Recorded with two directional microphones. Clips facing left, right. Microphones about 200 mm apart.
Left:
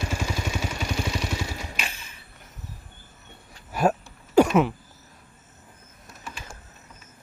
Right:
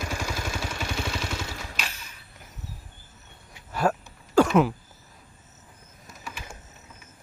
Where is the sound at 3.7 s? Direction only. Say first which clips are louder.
Left 2 dB; 15° left (ahead or behind).